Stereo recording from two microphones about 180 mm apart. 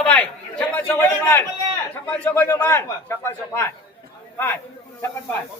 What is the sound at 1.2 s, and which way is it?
A man's voice, 15° left (ahead or behind).